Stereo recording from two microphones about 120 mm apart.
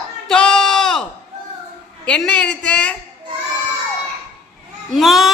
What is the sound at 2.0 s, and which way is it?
Speech, 10° left (ahead or behind).